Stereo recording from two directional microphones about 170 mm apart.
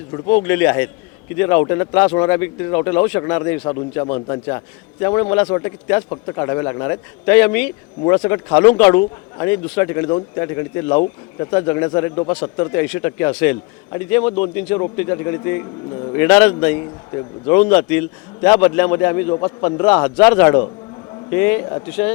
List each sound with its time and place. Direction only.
0.4 s a man's voice: 10° left (ahead or behind)
16.1 s a man's voice: 10° left (ahead or behind)
17.2 s a man's voice: 20° left (ahead or behind)
17.6 s a man's voice: 10° left (ahead or behind)